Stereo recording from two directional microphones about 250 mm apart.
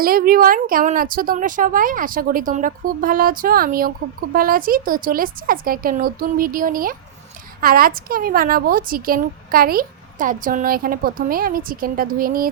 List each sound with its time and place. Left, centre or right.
0.0 s a woman's voice: right